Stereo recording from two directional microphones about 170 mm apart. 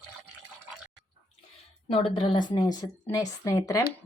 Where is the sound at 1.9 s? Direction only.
35° left (ahead or behind).